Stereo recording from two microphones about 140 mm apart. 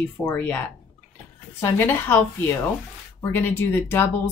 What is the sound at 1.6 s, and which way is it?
Speech, 15° left (ahead or behind).